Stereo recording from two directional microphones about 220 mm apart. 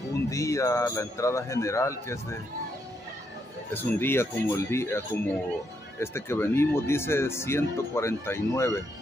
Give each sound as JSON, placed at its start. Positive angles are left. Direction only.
{"t": 0.1, "sound": "speech", "side_deg": 15}
{"t": 3.7, "sound": "speech", "side_deg": 10}